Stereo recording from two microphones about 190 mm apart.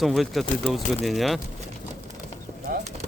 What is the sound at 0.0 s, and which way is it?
A man's voice, centre (ahead or behind).